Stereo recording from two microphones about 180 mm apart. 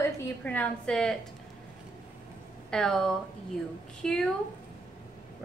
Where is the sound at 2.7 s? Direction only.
5° left (ahead or behind).